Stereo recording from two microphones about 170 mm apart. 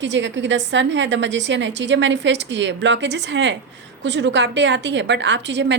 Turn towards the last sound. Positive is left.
turn(degrees=-90)